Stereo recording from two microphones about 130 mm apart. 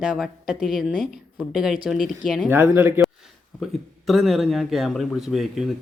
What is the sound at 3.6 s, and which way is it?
A man's voice, centre (ahead or behind).